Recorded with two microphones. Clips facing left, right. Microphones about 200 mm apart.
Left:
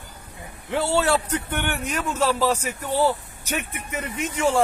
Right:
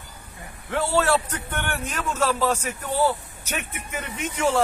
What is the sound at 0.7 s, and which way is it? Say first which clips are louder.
A man's voice: even; 20° left (ahead or behind).